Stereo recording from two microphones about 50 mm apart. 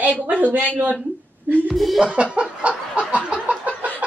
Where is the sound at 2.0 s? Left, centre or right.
Right.